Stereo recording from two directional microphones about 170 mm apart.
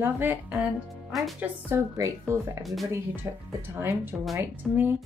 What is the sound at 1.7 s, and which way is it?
Speech, 15° right (ahead or behind).